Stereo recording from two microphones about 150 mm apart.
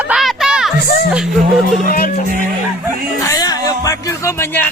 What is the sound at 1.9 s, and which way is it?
Music, 70° left (ahead or behind).